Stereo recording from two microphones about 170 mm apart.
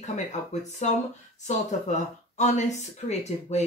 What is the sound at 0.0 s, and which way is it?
Speech, 45° left (ahead or behind).